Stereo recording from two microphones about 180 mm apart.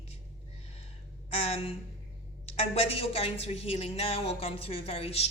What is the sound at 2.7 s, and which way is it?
Speech, 35° left (ahead or behind).